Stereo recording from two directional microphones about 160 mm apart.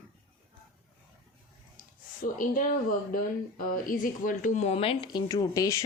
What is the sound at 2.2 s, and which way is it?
A woman's voice, 60° left (ahead or behind).